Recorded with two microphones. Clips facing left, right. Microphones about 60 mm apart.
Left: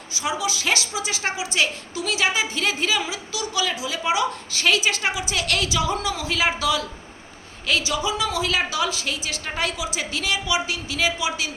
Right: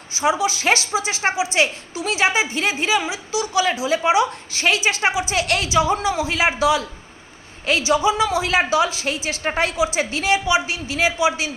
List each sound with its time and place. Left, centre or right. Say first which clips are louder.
0.1 s a woman's voice: right 6 dB; right